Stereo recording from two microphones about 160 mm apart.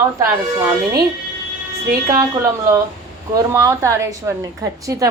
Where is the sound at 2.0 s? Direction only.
15° right (ahead or behind).